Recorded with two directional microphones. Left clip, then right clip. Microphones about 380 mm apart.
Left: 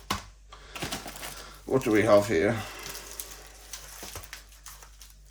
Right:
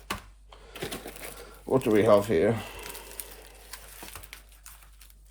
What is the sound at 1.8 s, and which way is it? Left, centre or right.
Speech, centre.